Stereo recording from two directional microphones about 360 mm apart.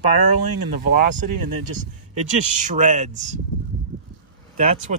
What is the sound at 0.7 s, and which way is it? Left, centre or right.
Speech, right.